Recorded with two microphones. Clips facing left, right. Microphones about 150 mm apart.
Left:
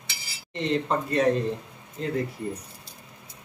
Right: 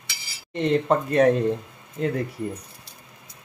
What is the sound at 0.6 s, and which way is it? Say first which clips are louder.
Speech: right 5 dB; 55° right (ahead or behind).